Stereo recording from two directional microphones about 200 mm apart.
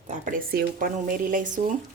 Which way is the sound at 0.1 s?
45° right (ahead or behind).